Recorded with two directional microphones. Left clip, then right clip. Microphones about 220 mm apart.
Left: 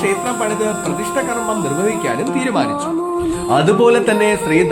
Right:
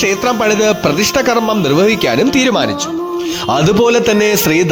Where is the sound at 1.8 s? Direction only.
45° right (ahead or behind).